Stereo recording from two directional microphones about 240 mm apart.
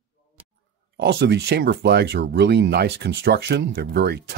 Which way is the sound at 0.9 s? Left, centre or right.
Right.